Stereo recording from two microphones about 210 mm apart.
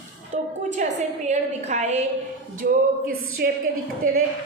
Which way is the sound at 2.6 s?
45° right (ahead or behind).